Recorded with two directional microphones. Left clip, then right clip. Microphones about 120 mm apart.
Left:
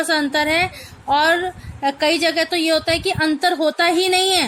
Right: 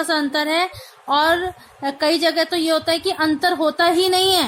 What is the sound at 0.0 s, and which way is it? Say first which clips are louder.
A woman's voice: left 2 dB; 35° left (ahead or behind).